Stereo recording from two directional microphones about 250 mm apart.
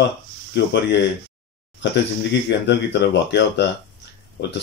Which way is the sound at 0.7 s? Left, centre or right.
Left.